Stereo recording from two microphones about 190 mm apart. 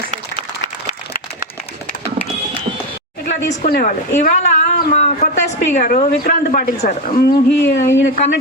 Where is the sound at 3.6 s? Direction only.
50° left (ahead or behind).